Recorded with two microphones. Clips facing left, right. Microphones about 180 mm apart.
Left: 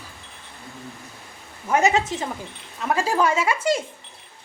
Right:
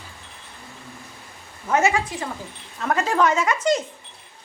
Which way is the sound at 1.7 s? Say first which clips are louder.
Left 1 dB; 15° left (ahead or behind).